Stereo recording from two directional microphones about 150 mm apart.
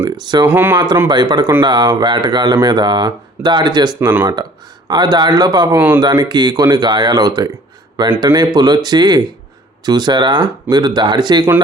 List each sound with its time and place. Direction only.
0.0 s speech: 30° right (ahead or behind)
0.4 s speech: 15° right (ahead or behind)
1.0 s speech: 30° right (ahead or behind)